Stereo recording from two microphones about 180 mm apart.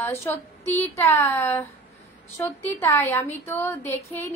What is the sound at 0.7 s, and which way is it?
A woman's voice, 15° left (ahead or behind).